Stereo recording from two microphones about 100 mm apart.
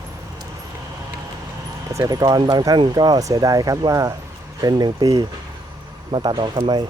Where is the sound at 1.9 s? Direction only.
35° right (ahead or behind).